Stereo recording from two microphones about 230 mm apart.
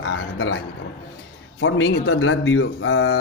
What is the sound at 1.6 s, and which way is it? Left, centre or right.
A man's voice, left.